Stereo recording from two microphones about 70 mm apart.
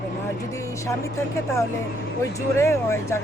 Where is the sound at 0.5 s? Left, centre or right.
Left.